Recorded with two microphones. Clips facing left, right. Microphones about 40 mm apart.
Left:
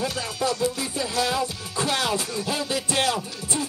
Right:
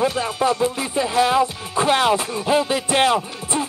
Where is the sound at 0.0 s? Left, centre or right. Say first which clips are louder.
Right 7 dB; right.